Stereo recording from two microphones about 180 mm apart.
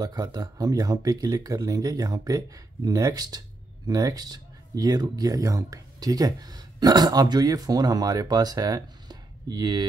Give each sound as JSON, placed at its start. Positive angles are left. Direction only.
{"t": 0.0, "sound": "speech", "side_deg": -25}